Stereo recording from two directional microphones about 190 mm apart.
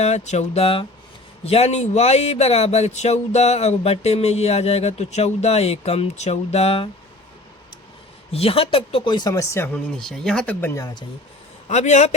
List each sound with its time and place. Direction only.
0.0 s speech: 35° left (ahead or behind)
8.3 s speech: 30° left (ahead or behind); by 10.8 s 10° left (ahead or behind)
11.7 s speech: 35° left (ahead or behind)